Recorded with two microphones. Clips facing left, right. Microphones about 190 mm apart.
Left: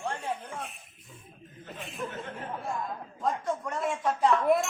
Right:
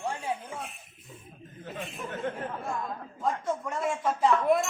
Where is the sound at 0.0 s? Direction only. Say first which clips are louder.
Right 1 dB; 10° right (ahead or behind).